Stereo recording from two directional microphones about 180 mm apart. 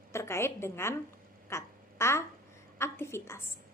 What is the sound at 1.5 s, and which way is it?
Quack, 15° left (ahead or behind).